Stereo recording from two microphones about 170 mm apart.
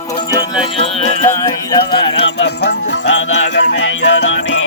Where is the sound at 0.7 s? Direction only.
35° left (ahead or behind).